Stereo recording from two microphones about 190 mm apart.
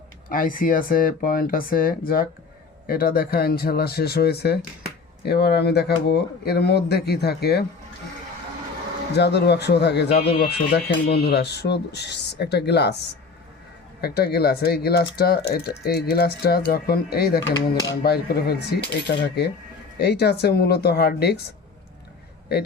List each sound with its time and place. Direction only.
0.3 s speech: 45° left (ahead or behind)
9.1 s speech: 60° left (ahead or behind)
14.0 s speech: 55° left (ahead or behind)
17.5 s speech: 20° left (ahead or behind)
18.0 s speech: 55° left (ahead or behind)